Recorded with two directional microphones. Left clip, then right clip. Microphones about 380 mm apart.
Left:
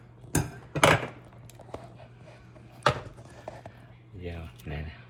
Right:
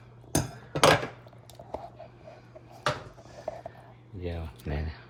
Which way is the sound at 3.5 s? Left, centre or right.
Left.